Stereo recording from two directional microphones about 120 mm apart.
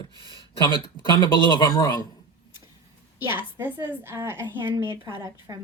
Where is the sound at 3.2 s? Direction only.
15° right (ahead or behind).